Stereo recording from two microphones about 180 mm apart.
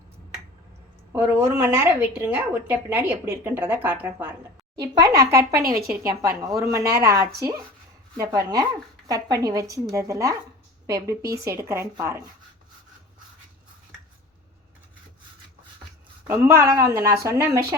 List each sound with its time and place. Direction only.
1.1 s a woman's voice: 15° right (ahead or behind)
5.6 s a woman's voice: 55° right (ahead or behind)
5.9 s a woman's voice: 10° right (ahead or behind)
16.2 s a woman's voice: 15° right (ahead or behind)